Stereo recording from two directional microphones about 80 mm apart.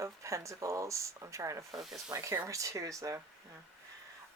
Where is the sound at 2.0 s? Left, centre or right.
Right.